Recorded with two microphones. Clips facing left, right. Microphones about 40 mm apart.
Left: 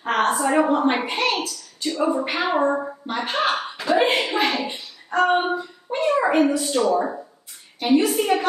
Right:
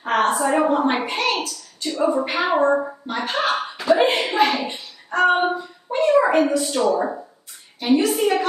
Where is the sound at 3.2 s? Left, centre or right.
Centre.